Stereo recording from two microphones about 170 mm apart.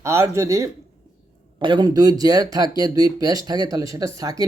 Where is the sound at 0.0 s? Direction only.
15° right (ahead or behind).